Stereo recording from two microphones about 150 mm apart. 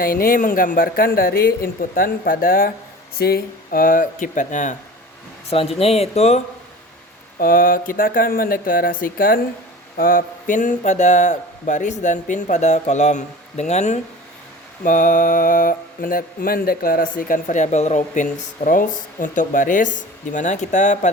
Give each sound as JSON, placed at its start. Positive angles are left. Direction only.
{"t": 0.0, "sound": "speech", "side_deg": 80}
{"t": 3.2, "sound": "speech", "side_deg": 90}
{"t": 5.5, "sound": "speech", "side_deg": 40}
{"t": 7.3, "sound": "speech", "side_deg": 70}
{"t": 14.8, "sound": "speech", "side_deg": 60}